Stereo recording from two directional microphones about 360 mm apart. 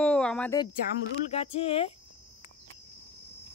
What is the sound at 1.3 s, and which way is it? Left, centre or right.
Cricket, centre.